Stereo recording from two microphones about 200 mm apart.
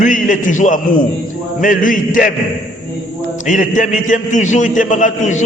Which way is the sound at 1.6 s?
40° left (ahead or behind).